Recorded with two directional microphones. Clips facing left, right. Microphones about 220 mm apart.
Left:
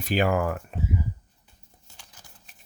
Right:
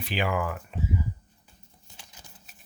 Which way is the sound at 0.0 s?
45° left (ahead or behind).